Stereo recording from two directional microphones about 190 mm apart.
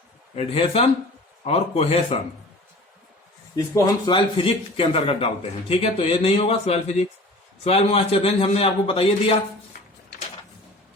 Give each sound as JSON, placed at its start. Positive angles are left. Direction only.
{"t": 0.3, "sound": "a man's voice", "side_deg": 30}
{"t": 3.5, "sound": "a man's voice", "side_deg": 20}